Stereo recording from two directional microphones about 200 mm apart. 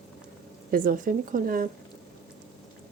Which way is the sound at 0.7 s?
45° right (ahead or behind).